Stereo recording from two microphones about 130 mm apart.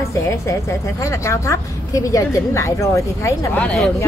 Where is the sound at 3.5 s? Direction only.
10° left (ahead or behind).